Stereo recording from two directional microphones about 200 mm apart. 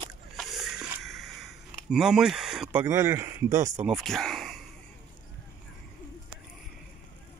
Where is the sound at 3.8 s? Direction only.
Centre (ahead or behind).